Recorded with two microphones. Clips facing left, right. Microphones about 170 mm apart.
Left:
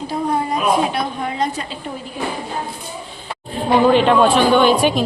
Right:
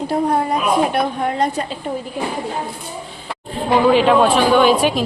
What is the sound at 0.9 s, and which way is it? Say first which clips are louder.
Speech: right 3 dB; 55° right (ahead or behind).